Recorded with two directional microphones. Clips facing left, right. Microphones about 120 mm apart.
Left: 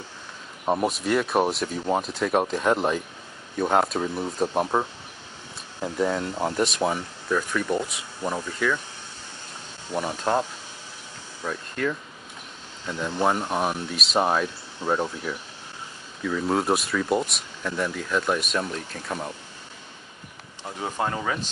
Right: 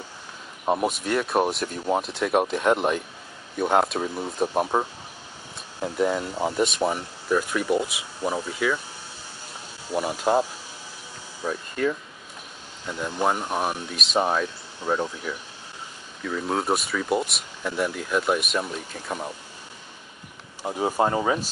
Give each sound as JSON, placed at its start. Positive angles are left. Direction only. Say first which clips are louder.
{"t": 0.7, "sound": "speech", "louder": "even", "side_deg": 0}
{"t": 9.8, "sound": "speech", "louder": "right 2 dB", "side_deg": -10}
{"t": 11.4, "sound": "speech", "louder": "right 2 dB", "side_deg": -10}
{"t": 16.3, "sound": "speech", "louder": "left 2 dB", "side_deg": 0}
{"t": 20.6, "sound": "speech", "louder": "right 5 dB", "side_deg": -15}